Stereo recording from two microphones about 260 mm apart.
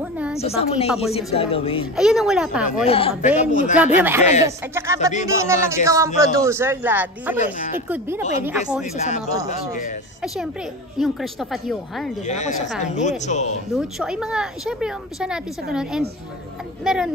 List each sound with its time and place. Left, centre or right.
0.0 s a sound: centre
0.4 s speech: left
2.0 s a woman's voice: centre
2.9 s speech: left
3.7 s speech: centre
7.3 s speech: left
8.9 s speech: left
10.2 s a woman's voice: centre
12.3 s speech: left
13.7 s a woman's voice: centre